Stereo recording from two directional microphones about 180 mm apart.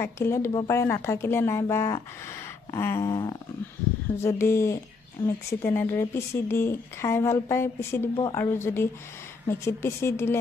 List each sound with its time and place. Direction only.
0.0 s speech: 15° left (ahead or behind)